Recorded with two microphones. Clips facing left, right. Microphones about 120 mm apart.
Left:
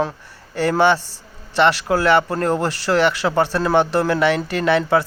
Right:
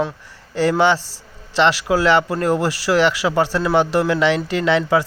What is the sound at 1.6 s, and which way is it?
A man's voice, 15° right (ahead or behind).